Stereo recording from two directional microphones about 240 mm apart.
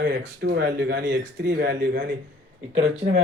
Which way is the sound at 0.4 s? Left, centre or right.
Right.